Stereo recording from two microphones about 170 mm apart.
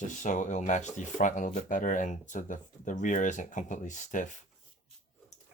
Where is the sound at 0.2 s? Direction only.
45° left (ahead or behind).